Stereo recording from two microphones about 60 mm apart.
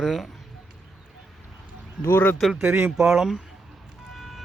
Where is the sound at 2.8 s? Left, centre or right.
Centre.